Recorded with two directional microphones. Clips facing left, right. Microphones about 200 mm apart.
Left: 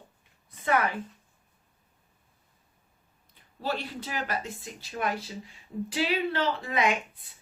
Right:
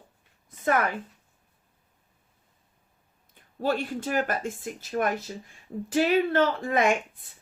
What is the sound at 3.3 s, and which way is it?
Speech, 50° right (ahead or behind).